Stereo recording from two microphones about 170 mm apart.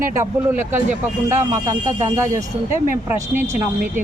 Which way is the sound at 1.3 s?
15° right (ahead or behind).